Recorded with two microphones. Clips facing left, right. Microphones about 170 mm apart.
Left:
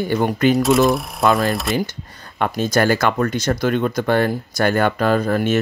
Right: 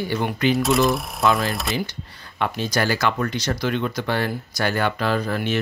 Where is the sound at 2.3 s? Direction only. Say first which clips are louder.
Left 5 dB; 50° left (ahead or behind).